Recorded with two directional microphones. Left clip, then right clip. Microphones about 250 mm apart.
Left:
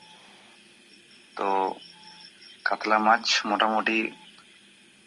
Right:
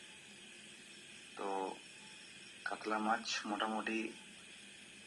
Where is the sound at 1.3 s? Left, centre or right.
Left.